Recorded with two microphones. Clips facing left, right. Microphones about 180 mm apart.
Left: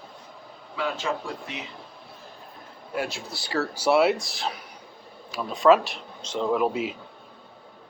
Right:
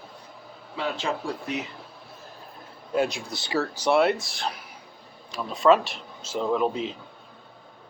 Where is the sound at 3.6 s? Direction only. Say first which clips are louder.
Left 1 dB; 5° left (ahead or behind).